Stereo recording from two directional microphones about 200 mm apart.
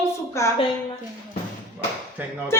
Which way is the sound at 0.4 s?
15° left (ahead or behind).